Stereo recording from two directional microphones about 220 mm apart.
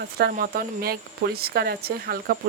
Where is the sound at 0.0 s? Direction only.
45° right (ahead or behind).